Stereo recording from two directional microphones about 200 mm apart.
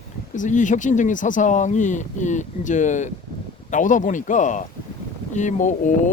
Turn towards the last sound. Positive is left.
turn(degrees=40)  # may be behind; listen again after turning